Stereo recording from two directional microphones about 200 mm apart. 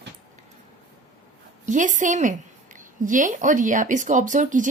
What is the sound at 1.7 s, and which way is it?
A woman's voice, 40° right (ahead or behind).